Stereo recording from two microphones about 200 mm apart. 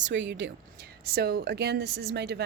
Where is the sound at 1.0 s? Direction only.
50° right (ahead or behind).